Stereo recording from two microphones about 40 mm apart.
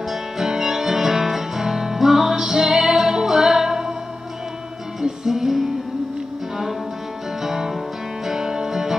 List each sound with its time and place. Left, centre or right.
0.1 s music: centre
2.4 s music: centre
2.7 s music: centre
5.0 s music: centre
7.4 s music: centre